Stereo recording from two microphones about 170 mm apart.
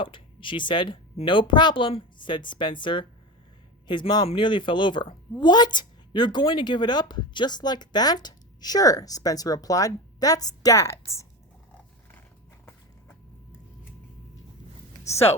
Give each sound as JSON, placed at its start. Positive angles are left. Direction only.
{"t": 0.0, "sound": "a woman's voice", "side_deg": 30}
{"t": 15.0, "sound": "speech", "side_deg": 40}